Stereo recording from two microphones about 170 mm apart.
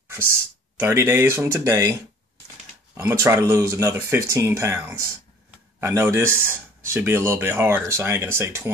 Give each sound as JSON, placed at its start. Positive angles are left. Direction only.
{"t": 0.7, "sound": "speech", "side_deg": -15}